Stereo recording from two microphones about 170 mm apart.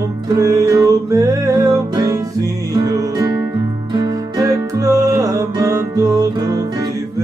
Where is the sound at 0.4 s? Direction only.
20° right (ahead or behind).